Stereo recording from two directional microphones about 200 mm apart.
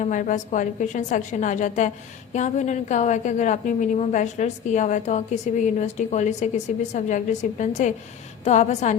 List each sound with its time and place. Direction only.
0.0 s a woman's voice: 40° left (ahead or behind)